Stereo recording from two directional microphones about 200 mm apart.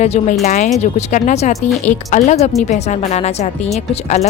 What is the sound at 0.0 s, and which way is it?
Speech, 35° left (ahead or behind).